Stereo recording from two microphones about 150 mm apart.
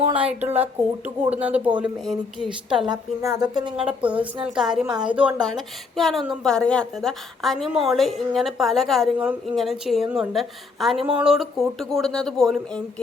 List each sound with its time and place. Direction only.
0.2 s speech: 10° right (ahead or behind)
2.8 s a woman's voice: 25° right (ahead or behind)
3.6 s a woman's voice: 30° right (ahead or behind)
3.8 s a woman's voice: 10° right (ahead or behind)
9.1 s a woman's voice: 10° right (ahead or behind)